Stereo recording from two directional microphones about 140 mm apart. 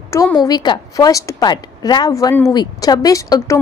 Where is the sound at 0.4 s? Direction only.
30° left (ahead or behind).